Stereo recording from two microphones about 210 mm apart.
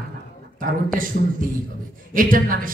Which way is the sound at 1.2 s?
45° right (ahead or behind).